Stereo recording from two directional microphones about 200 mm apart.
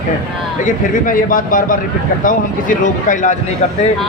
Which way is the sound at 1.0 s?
45° left (ahead or behind).